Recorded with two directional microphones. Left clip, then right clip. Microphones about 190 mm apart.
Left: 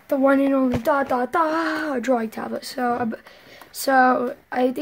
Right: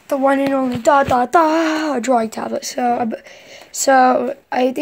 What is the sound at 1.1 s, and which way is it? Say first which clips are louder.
Speech: right 7 dB; 25° right (ahead or behind).